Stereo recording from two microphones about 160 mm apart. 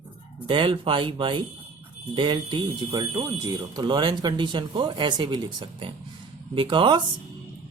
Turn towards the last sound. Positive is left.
turn(degrees=-30)  # may be behind; listen again after turning